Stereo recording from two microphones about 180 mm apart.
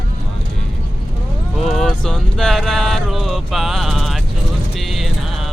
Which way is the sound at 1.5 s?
Centre (ahead or behind).